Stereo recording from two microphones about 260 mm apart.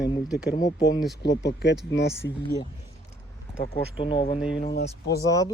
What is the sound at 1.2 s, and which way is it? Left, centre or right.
Speech, left.